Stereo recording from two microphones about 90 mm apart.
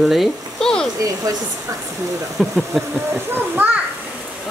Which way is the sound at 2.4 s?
5° right (ahead or behind).